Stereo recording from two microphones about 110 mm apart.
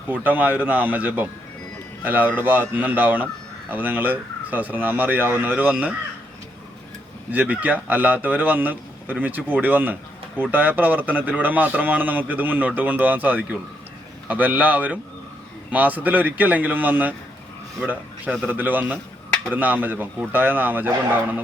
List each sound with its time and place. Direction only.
0.1 s a man's voice: 15° right (ahead or behind)
7.3 s a man's voice: 15° right (ahead or behind)